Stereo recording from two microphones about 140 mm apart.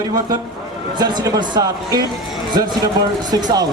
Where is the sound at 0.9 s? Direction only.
30° right (ahead or behind).